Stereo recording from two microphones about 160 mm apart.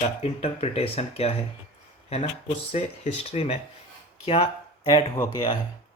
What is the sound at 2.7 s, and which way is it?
Speech, 40° left (ahead or behind).